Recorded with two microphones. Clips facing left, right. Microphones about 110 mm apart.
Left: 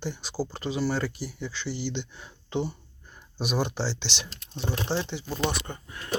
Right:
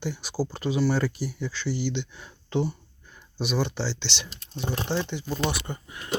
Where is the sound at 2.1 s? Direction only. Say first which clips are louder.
Right 3 dB; 20° left (ahead or behind).